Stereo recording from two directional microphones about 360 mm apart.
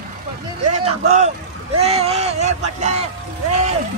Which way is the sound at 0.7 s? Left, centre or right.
Centre.